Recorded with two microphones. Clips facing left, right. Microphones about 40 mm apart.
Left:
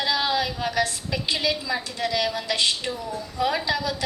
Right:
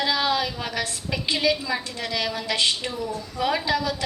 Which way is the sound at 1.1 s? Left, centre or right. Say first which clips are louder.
Right 6 dB; centre.